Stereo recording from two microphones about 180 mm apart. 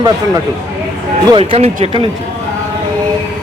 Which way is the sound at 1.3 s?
30° right (ahead or behind).